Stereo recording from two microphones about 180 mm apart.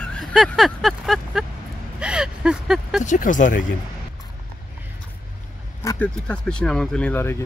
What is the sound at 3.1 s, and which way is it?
Speech, 45° left (ahead or behind).